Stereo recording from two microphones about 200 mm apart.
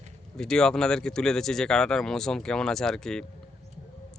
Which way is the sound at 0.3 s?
5° left (ahead or behind).